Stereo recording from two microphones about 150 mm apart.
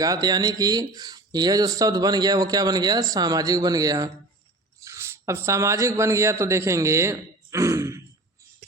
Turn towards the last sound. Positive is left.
turn(degrees=-20)  # may be behind; listen again after turning